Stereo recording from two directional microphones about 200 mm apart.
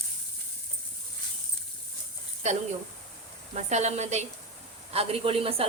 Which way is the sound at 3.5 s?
35° right (ahead or behind).